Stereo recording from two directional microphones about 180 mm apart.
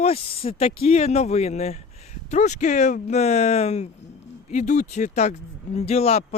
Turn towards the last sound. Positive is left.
turn(degrees=35)  # may be behind; listen again after turning